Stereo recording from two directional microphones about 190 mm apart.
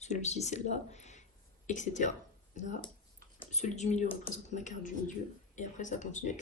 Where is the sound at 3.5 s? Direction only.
35° left (ahead or behind).